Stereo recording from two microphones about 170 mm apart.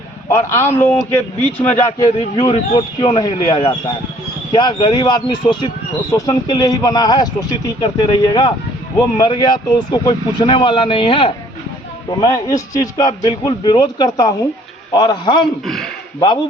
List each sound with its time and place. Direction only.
0.3 s a man's voice: 15° left (ahead or behind)
2.0 s speech: 20° left (ahead or behind)
12.2 s speech: 20° left (ahead or behind)
15.6 s speech: centre (ahead or behind)